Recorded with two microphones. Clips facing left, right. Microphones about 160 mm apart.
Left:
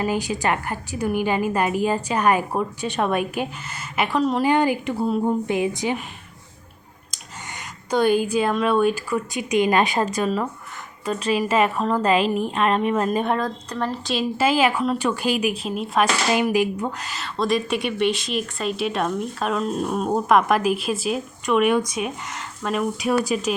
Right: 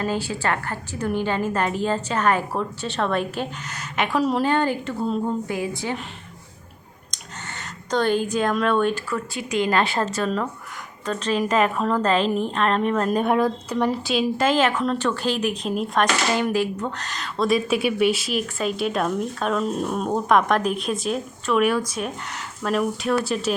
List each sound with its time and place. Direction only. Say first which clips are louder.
0.0 s a woman's voice: left 2 dB; 15° left (ahead or behind); by 4.4 s centre (ahead or behind)
4.4 s a woman's voice: left 2 dB; 15° left (ahead or behind)
5.2 s a woman's voice: left 4 dB; 20° left (ahead or behind)
7.1 s a sound: right 1 dB; 5° left (ahead or behind)
7.9 s a woman's voice: left 2 dB; 10° left (ahead or behind); by 13.9 s 10° right (ahead or behind)
14.1 s a woman's voice: left 3 dB; 5° left (ahead or behind)
16.3 s speech: left 2 dB; 15° left (ahead or behind)